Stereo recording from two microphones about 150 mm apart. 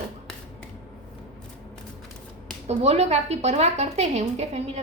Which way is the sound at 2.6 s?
45° right (ahead or behind).